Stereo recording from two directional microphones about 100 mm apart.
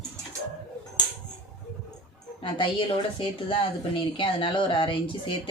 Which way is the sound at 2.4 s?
60° left (ahead or behind).